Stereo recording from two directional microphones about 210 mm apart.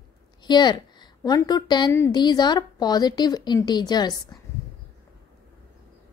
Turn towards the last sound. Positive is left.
turn(degrees=20)  # may be behind; listen again after turning